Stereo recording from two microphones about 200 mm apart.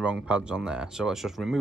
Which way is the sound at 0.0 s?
5° right (ahead or behind).